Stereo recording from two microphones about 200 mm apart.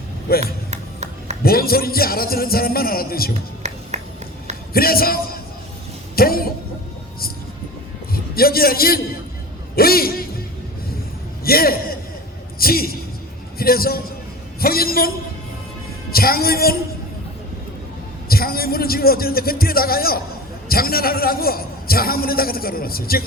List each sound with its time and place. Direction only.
0.3 s a man's voice: 50° left (ahead or behind)
0.7 s music: 35° right (ahead or behind)
1.5 s a man's voice: 50° left (ahead or behind)
3.6 s a sound: 35° right (ahead or behind)
4.7 s a man's voice: 50° left (ahead or behind)
8.1 s a man's voice: 50° left (ahead or behind)
11.4 s a man's voice: 50° left (ahead or behind)
12.5 s a sound: 50° left (ahead or behind)
13.6 s a man's voice: 50° left (ahead or behind)
16.1 s a man's voice: 50° left (ahead or behind)
18.3 s a man's voice: 50° left (ahead or behind)